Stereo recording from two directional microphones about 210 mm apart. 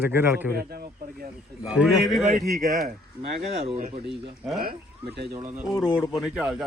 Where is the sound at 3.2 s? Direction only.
30° right (ahead or behind).